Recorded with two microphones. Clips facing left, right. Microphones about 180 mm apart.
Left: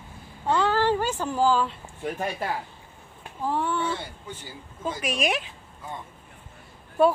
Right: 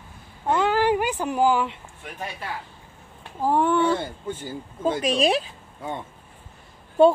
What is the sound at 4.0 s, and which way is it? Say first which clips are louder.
Speech: right 8 dB; 50° right (ahead or behind).